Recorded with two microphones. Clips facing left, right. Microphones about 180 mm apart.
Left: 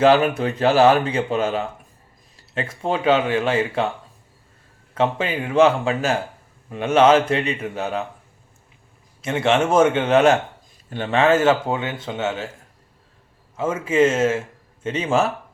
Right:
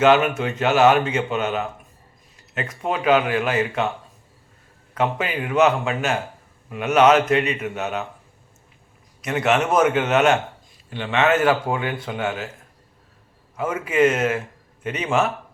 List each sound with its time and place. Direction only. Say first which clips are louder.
0.0 s speech: left 1 dB; 35° left (ahead or behind)
4.9 s speech: left 2 dB; 30° left (ahead or behind)
9.2 s speech: left 1 dB; 25° left (ahead or behind)
10.8 s speech: left 2 dB; 45° left (ahead or behind); by 12.5 s 25° left (ahead or behind)
13.6 s speech: left 1 dB; 25° left (ahead or behind)